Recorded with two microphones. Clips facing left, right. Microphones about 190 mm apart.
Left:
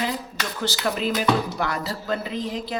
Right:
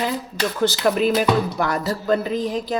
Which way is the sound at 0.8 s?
50° right (ahead or behind).